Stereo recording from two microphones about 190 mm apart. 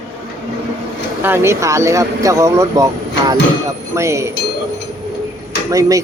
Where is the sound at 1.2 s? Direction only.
10° right (ahead or behind).